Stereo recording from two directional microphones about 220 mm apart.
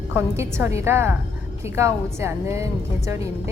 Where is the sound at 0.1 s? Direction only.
10° right (ahead or behind).